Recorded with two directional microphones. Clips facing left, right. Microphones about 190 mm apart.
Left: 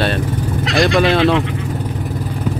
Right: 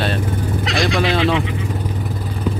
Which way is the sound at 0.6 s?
Centre (ahead or behind).